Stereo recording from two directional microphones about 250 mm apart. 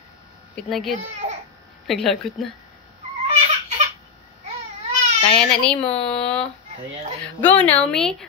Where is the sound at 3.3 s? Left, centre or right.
Right.